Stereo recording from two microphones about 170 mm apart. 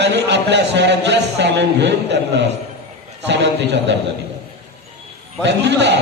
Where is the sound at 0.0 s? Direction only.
90° right.